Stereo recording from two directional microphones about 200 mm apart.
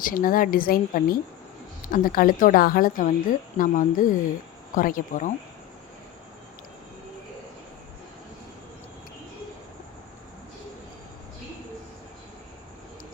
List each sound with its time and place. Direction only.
0.0 s a woman's voice: 45° left (ahead or behind)